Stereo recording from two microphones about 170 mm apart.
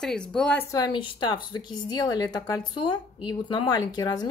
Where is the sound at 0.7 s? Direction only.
25° left (ahead or behind).